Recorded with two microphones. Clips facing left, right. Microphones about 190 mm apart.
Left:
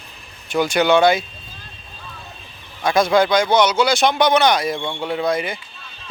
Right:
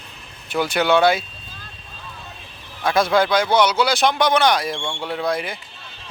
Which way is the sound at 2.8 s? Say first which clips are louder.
Left 2 dB; centre (ahead or behind).